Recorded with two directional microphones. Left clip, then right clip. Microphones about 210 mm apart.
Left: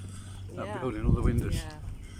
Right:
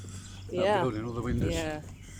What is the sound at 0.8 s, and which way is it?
Speech, centre (ahead or behind).